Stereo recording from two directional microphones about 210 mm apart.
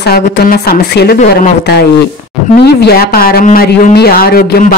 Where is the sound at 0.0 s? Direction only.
50° left (ahead or behind).